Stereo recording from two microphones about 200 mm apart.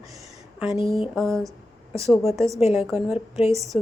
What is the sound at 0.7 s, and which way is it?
Speech, 30° left (ahead or behind).